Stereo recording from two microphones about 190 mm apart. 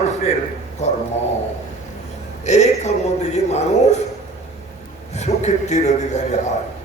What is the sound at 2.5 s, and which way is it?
A man's voice, 35° left (ahead or behind).